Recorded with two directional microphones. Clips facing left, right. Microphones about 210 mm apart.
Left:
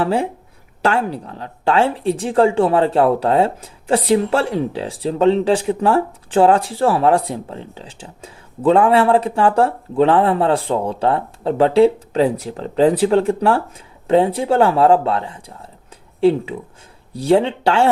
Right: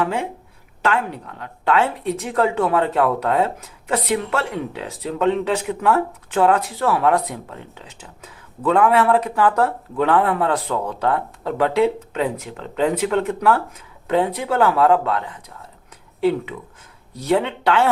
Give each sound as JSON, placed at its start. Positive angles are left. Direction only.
{"t": 0.0, "sound": "speech", "side_deg": 35}